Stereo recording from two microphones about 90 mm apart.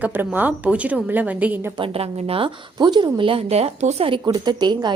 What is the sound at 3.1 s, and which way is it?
A woman's voice, 85° right.